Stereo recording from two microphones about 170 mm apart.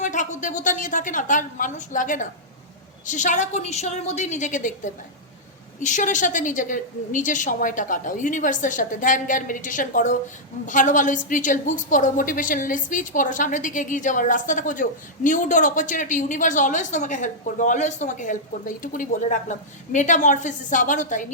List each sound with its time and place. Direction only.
0.0 s a woman's voice: 45° left (ahead or behind)